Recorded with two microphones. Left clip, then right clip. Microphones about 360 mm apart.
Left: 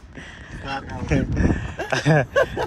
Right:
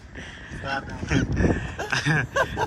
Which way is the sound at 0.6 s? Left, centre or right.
Right.